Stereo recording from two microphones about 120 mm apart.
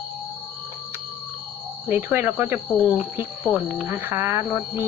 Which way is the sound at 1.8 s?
15° right (ahead or behind).